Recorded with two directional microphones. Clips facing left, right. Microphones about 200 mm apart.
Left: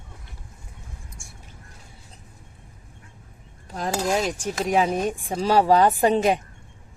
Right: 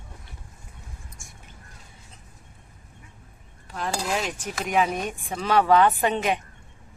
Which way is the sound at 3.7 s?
40° left (ahead or behind).